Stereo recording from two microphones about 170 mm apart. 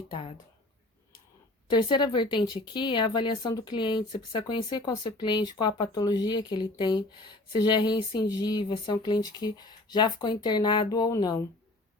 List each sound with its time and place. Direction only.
1.6 s speech: 25° left (ahead or behind)